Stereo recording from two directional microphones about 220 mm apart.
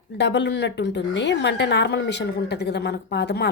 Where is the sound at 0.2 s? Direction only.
55° left (ahead or behind).